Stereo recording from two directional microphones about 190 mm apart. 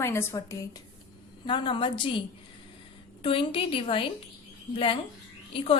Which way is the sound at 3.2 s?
25° left (ahead or behind).